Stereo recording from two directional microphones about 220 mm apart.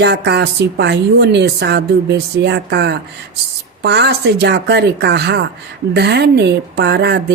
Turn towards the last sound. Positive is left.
turn(degrees=-50)  # may be behind; listen again after turning